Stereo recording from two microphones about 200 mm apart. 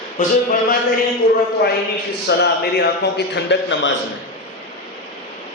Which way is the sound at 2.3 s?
55° left (ahead or behind).